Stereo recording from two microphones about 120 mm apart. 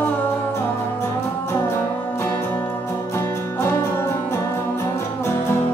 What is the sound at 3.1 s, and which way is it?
Music, 25° left (ahead or behind).